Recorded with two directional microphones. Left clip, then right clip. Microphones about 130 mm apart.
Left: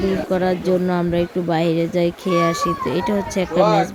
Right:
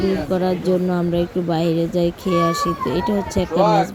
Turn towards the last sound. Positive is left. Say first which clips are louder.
# even
turn(degrees=-35)  # may be behind; listen again after turning